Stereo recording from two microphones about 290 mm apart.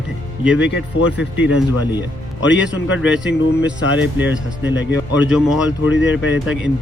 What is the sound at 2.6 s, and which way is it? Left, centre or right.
Speech, centre.